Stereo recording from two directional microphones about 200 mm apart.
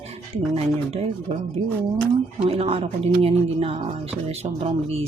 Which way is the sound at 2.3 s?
30° right (ahead or behind).